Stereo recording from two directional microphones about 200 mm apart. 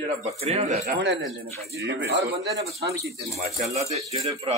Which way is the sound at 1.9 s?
50° right (ahead or behind).